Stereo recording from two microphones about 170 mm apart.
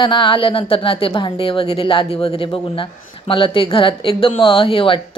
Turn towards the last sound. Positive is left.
turn(degrees=30)  # may be behind; listen again after turning